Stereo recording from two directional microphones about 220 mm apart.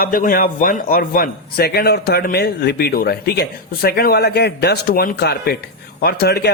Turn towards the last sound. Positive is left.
turn(degrees=45)  # may be behind; listen again after turning